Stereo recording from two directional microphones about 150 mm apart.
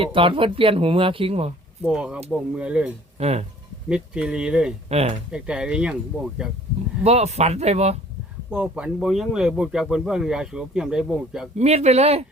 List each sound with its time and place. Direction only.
0.0 s speech: 35° right (ahead or behind)
1.8 s speech: 5° right (ahead or behind)
3.2 s speech: 45° right (ahead or behind)
3.8 s speech: 5° right (ahead or behind)
4.9 s speech: 45° right (ahead or behind)
5.3 s speech: 5° right (ahead or behind)
7.0 s speech: 45° right (ahead or behind)
8.4 s speech: 5° right (ahead or behind)
11.5 s speech: 45° right (ahead or behind)